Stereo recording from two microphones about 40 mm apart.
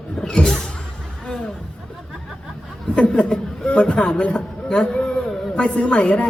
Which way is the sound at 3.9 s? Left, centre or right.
Left.